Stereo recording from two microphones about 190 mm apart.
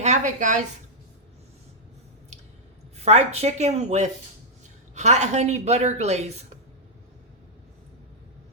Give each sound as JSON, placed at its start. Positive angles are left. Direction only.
{"t": 0.0, "sound": "a woman's voice", "side_deg": -40}
{"t": 3.0, "sound": "a woman's voice", "side_deg": -35}